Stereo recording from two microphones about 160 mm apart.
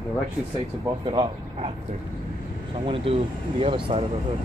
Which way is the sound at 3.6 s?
40° right (ahead or behind).